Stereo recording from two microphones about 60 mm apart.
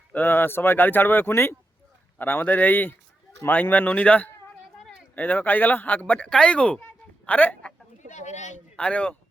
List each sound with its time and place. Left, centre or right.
0.1 s speech: left
8.7 s speech: centre